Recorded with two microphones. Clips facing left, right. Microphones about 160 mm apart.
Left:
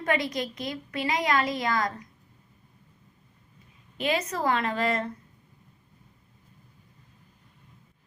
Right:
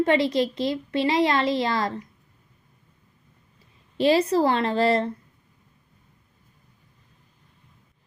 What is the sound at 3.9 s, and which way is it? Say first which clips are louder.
A woman's voice: right 9 dB; 30° right (ahead or behind).